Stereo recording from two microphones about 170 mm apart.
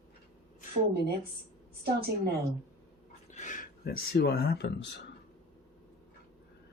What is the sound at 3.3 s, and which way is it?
Speech, 50° left (ahead or behind).